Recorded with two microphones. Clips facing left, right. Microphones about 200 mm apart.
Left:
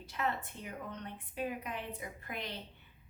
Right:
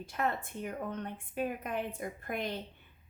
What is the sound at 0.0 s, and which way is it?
A woman's voice, 50° right (ahead or behind).